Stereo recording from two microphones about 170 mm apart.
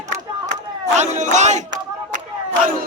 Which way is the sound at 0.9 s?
45° right (ahead or behind).